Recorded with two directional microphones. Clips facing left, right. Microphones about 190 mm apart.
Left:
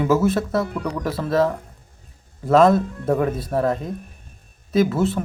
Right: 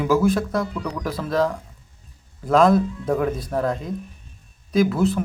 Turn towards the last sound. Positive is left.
turn(degrees=0)  # may be behind; listen again after turning